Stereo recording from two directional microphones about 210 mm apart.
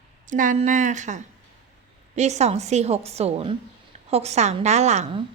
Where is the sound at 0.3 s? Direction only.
40° right (ahead or behind).